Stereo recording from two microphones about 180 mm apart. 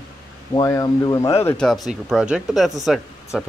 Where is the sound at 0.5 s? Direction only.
20° left (ahead or behind).